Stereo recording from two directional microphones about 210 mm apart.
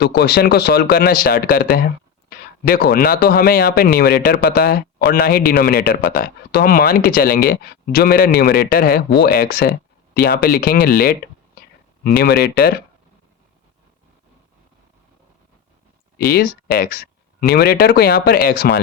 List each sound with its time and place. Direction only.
0.0 s speech: 50° left (ahead or behind)
16.1 s speech: 45° left (ahead or behind)